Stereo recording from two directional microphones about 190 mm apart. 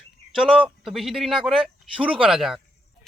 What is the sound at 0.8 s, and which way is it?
Speech, centre (ahead or behind).